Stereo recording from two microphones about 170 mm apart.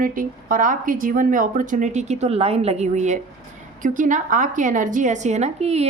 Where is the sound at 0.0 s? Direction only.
55° right (ahead or behind).